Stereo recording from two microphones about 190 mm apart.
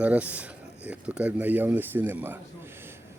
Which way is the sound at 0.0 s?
5° right (ahead or behind).